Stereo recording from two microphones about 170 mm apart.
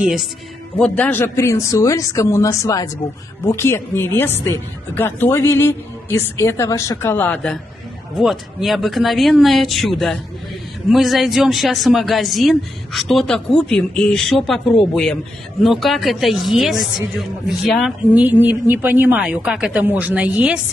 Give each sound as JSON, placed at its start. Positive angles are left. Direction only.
{"t": 0.0, "sound": "speech", "side_deg": -5}